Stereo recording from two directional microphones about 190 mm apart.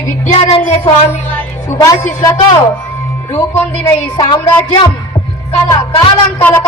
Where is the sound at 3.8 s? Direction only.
20° left (ahead or behind).